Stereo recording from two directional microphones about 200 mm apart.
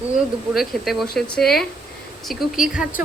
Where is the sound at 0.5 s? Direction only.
Centre (ahead or behind).